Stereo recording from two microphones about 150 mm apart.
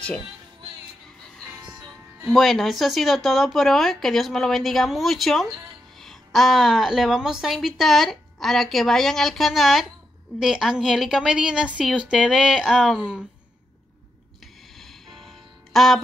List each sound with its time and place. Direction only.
2.3 s a woman's voice: centre (ahead or behind)
14.8 s music: centre (ahead or behind)